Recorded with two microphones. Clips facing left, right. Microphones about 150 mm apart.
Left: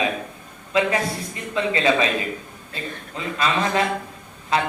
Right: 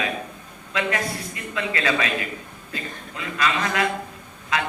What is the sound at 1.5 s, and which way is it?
Speech, 25° left (ahead or behind).